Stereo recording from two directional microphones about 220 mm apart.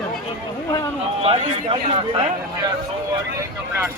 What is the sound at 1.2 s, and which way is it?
Speech, 25° right (ahead or behind).